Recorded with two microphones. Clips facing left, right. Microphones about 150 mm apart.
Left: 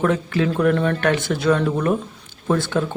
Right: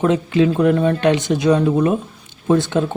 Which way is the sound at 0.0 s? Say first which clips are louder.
Right 4 dB; 20° right (ahead or behind).